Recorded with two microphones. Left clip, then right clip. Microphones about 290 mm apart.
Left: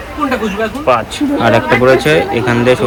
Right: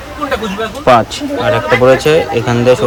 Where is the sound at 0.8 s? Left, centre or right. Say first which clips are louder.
Right 5 dB; right.